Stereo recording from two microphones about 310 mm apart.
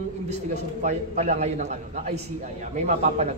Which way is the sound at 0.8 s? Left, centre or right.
Right.